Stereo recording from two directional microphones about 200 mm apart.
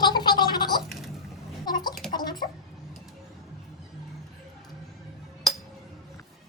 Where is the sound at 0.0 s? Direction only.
20° left (ahead or behind).